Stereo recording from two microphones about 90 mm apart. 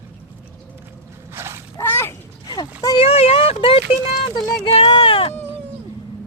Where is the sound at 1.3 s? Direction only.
30° right (ahead or behind).